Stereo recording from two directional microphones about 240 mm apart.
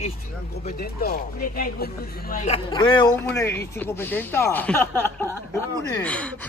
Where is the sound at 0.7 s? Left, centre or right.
Left.